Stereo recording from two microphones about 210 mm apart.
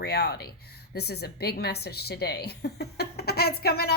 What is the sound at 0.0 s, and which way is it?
A woman's voice, 50° left (ahead or behind).